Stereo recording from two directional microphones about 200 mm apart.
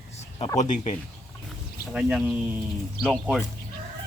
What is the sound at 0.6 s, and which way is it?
Speech, 35° left (ahead or behind).